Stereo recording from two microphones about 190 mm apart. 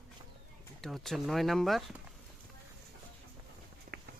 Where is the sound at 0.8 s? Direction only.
Centre (ahead or behind).